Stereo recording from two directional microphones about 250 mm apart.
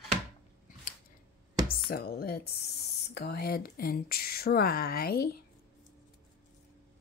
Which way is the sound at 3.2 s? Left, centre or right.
Left.